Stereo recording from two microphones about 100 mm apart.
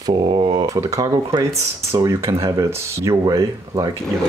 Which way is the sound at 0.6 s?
35° right (ahead or behind).